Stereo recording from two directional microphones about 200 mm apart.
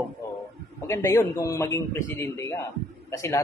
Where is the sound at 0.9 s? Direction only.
15° left (ahead or behind).